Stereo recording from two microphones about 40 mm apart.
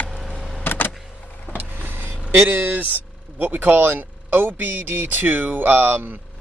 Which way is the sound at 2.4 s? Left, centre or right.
Right.